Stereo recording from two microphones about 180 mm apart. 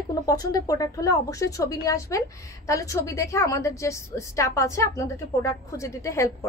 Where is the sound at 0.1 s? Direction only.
20° left (ahead or behind).